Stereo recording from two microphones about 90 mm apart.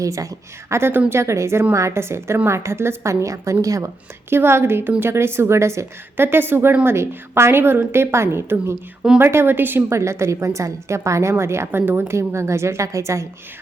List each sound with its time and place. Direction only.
0.0 s a woman's voice: 40° right (ahead or behind)
4.3 s a woman's voice: 25° right (ahead or behind)